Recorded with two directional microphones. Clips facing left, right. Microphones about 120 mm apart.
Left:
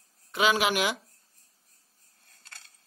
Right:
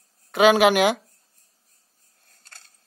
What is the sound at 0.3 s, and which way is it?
Speech, 65° right (ahead or behind).